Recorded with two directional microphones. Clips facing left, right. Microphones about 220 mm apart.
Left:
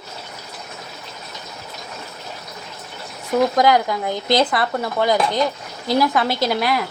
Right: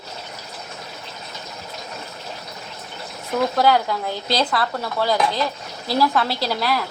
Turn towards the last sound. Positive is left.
turn(degrees=15)  # may be behind; listen again after turning